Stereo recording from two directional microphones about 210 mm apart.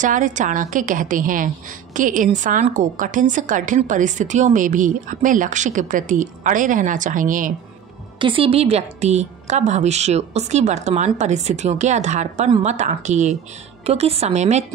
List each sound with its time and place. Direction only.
0.0 s a woman's voice: 35° right (ahead or behind)
8.2 s a woman's voice: 25° right (ahead or behind)